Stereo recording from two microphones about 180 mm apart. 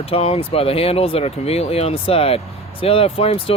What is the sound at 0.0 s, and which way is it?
Speech, 35° left (ahead or behind).